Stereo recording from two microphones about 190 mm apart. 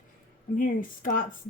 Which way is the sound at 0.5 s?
45° left (ahead or behind).